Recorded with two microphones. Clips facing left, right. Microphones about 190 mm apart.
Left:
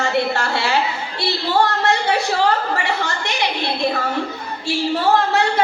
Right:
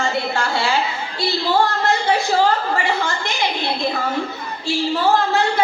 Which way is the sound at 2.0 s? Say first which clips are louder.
Right 1 dB; 65° left (ahead or behind).